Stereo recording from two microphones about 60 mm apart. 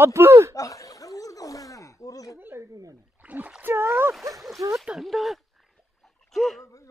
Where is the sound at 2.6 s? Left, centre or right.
Right.